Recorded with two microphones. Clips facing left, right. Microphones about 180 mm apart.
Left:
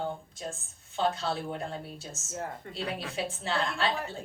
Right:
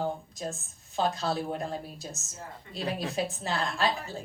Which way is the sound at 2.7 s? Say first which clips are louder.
Right 8 dB; 40° right (ahead or behind).